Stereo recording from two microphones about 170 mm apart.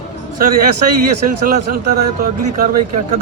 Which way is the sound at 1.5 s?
55° right (ahead or behind).